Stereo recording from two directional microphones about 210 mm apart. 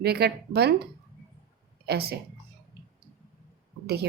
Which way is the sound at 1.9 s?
50° right (ahead or behind).